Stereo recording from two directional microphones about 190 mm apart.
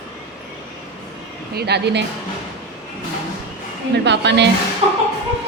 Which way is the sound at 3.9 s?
65° right (ahead or behind).